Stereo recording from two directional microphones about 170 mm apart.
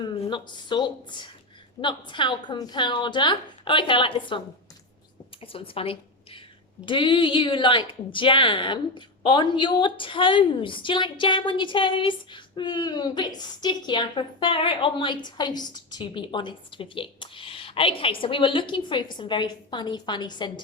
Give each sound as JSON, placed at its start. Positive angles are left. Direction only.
{"t": 0.0, "sound": "a woman's voice", "side_deg": 30}
{"t": 5.4, "sound": "a woman's voice", "side_deg": 35}